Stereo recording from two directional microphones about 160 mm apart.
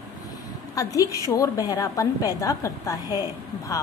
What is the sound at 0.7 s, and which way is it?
A woman's voice, 20° left (ahead or behind).